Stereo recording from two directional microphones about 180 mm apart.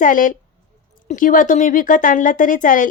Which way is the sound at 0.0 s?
45° left (ahead or behind).